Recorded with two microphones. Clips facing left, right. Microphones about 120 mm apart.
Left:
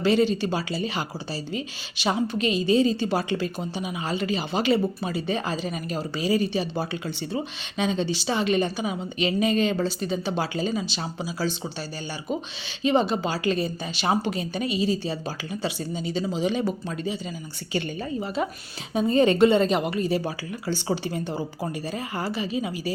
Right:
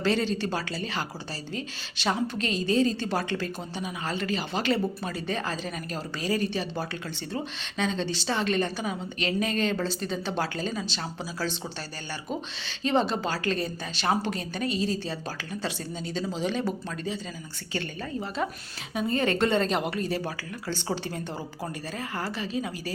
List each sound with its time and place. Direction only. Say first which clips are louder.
0.0 s a woman's voice: left 5 dB; 10° left (ahead or behind)
12.8 s a woman's voice: left 3 dB; 10° left (ahead or behind)
18.9 s a woman's voice: left 7 dB; 20° left (ahead or behind)
19.5 s a woman's voice: left 4 dB; 5° left (ahead or behind)